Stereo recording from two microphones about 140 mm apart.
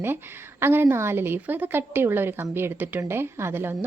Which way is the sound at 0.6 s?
15° right (ahead or behind).